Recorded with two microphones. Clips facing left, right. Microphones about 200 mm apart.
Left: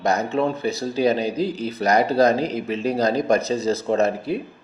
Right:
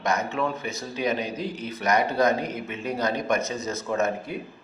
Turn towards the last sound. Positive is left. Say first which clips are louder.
# left 6 dB
turn(degrees=35)  # may be behind; listen again after turning